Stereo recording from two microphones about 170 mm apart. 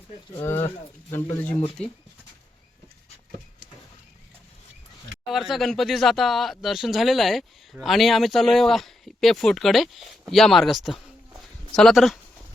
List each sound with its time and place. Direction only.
0.4 s speech: 15° left (ahead or behind)
5.3 s speech: centre (ahead or behind)